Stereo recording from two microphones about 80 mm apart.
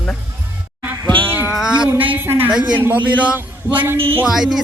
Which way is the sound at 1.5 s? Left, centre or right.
Centre.